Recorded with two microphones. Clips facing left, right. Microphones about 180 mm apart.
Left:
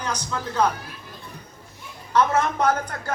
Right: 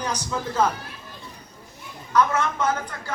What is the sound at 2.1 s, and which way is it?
A woman's voice, 35° left (ahead or behind).